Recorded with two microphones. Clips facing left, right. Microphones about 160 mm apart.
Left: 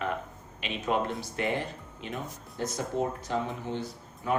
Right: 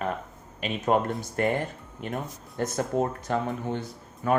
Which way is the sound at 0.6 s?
45° right (ahead or behind).